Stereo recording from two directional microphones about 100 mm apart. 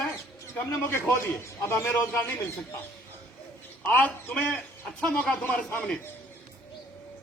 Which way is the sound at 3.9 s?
20° left (ahead or behind).